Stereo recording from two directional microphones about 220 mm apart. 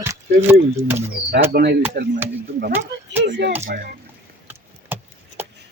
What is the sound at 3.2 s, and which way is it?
Speech, 50° right (ahead or behind).